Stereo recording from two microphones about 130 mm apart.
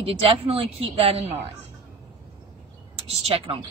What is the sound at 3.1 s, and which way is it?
Speech, 50° right (ahead or behind).